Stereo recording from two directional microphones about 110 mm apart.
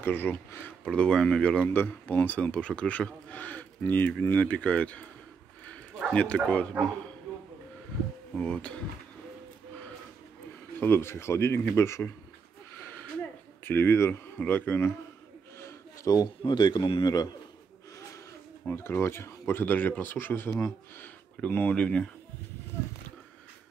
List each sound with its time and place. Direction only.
0.0 s speech: 20° left (ahead or behind)
0.8 s speech: 5° left (ahead or behind)
8.4 s speech: 10° left (ahead or behind)
10.8 s speech: 20° left (ahead or behind)
13.7 s speech: 20° left (ahead or behind)
14.4 s speech: 15° left (ahead or behind)
15.6 s a sound: 30° left (ahead or behind)
16.4 s a man's voice: 40° left (ahead or behind)
18.7 s speech: 20° left (ahead or behind)
22.7 s a sound: 25° left (ahead or behind)